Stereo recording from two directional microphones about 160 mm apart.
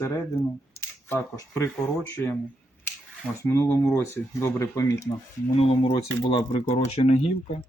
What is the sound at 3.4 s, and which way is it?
Speech, 15° left (ahead or behind).